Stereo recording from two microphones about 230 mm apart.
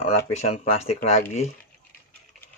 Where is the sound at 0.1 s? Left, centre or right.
Left.